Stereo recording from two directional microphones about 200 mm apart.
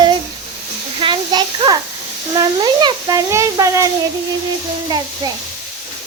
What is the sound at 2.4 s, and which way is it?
A child's voice, 20° right (ahead or behind).